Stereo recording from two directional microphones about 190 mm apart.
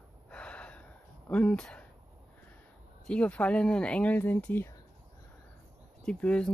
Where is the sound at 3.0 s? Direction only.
5° left (ahead or behind).